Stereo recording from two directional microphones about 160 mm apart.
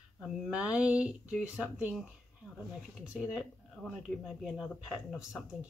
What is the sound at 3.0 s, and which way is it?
Speech, 5° right (ahead or behind).